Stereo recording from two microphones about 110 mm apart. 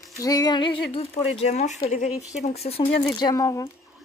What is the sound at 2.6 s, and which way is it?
Speech, 65° left (ahead or behind).